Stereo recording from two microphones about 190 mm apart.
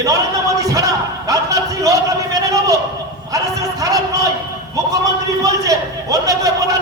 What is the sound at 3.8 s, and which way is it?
A man's voice, 20° right (ahead or behind).